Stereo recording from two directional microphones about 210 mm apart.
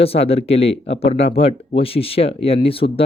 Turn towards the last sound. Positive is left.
turn(degrees=25)  # may be behind; listen again after turning